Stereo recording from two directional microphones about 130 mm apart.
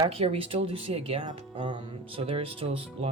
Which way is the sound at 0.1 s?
45° right (ahead or behind).